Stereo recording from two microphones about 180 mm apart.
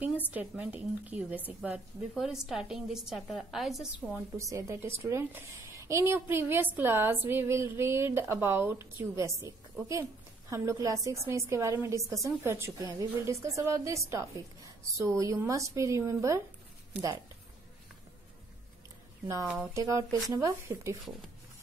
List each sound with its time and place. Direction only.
0.3 s a woman's voice: 10° right (ahead or behind)
19.4 s speech: 5° right (ahead or behind)
19.7 s a woman's voice: 15° right (ahead or behind)